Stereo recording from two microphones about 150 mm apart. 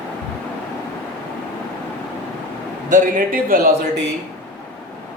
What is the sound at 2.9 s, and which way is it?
Speech, 65° right (ahead or behind).